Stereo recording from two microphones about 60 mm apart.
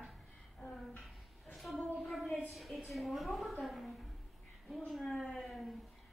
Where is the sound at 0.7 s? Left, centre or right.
Centre.